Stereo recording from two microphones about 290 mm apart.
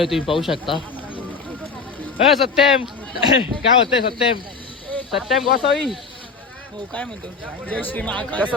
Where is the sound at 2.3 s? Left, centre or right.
Centre.